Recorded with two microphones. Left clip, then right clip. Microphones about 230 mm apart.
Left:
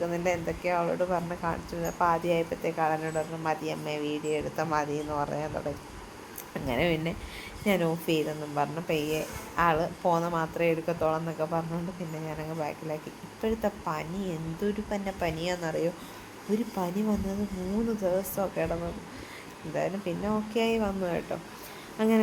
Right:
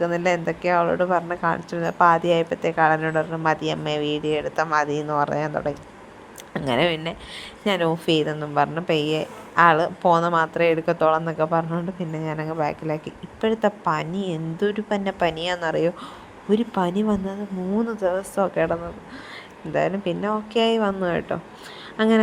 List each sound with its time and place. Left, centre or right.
0.0 s speech: right